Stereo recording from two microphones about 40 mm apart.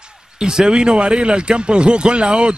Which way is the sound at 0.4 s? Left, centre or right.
Centre.